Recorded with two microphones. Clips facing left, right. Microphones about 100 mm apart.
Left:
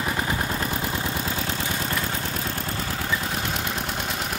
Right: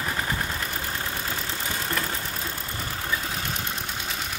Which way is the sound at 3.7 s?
65° left (ahead or behind).